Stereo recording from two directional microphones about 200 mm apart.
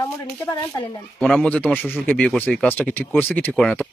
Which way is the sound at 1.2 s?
5° left (ahead or behind).